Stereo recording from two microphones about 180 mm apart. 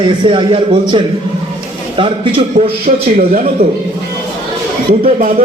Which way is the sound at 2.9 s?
55° right (ahead or behind).